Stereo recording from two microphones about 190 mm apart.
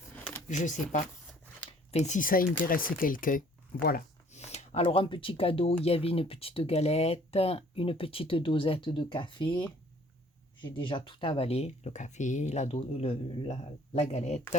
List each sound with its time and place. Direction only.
0.4 s speech: 40° left (ahead or behind)
4.3 s speech: 35° left (ahead or behind)